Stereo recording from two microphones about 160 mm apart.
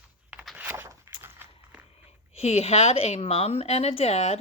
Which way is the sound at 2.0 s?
40° left (ahead or behind).